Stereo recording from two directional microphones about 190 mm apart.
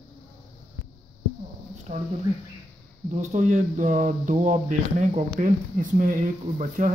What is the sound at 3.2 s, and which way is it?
Speech, 40° right (ahead or behind).